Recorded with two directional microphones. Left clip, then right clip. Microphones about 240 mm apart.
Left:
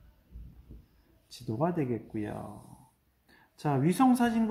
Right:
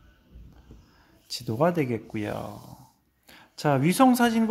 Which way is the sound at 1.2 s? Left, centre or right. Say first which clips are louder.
Right 8 dB; right.